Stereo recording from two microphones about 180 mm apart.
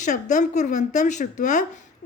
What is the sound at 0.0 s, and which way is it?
Speech, 45° left (ahead or behind).